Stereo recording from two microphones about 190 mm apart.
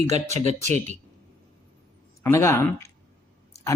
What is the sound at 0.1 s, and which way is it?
Speech, 35° right (ahead or behind).